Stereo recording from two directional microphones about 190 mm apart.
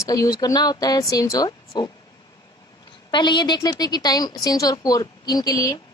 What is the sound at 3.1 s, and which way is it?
A woman's voice, 25° left (ahead or behind).